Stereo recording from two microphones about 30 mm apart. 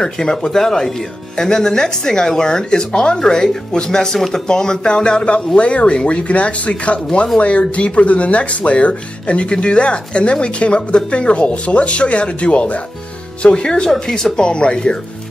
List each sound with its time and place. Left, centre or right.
0.0 s speech: left
5.6 s speech: left
13.4 s speech: left